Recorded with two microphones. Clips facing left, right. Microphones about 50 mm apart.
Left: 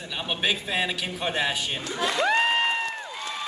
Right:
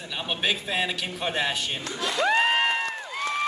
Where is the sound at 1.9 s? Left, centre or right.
Centre.